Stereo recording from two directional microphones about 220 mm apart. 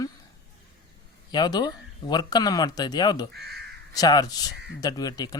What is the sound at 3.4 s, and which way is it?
Speech, 50° right (ahead or behind).